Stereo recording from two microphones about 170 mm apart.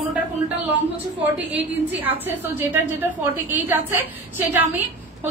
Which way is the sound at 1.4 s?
90° right.